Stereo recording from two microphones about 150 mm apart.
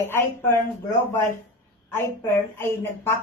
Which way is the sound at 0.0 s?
15° left (ahead or behind).